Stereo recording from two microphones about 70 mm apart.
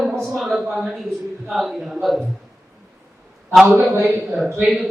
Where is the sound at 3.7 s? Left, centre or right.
Right.